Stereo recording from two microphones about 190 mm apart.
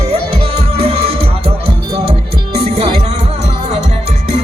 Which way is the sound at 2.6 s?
35° right (ahead or behind).